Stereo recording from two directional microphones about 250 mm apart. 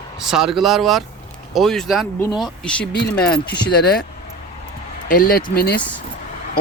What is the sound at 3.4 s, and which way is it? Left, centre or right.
Speech, left.